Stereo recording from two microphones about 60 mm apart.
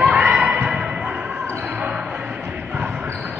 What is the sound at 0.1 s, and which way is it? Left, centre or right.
Music, centre.